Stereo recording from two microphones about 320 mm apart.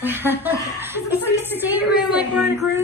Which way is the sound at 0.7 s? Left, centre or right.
Centre.